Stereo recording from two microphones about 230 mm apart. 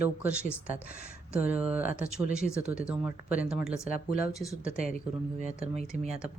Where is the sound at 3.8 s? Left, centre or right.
Left.